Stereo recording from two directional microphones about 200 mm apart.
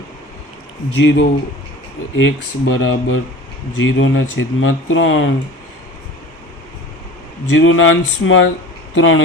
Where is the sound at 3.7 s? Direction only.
75° left (ahead or behind).